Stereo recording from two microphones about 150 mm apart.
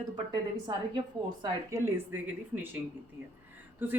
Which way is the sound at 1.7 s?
15° right (ahead or behind).